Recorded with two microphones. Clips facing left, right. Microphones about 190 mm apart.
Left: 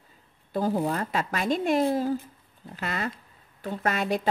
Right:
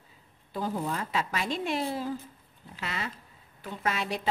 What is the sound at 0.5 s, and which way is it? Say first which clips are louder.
A woman's voice: left 6 dB; 40° left (ahead or behind).